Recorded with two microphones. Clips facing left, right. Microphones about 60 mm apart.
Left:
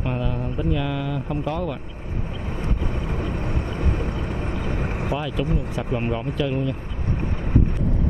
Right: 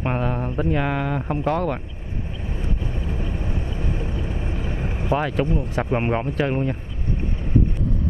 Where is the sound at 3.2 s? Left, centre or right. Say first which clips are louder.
Left 2 dB; left.